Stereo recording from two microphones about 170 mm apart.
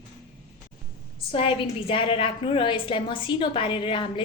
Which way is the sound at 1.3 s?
35° left (ahead or behind).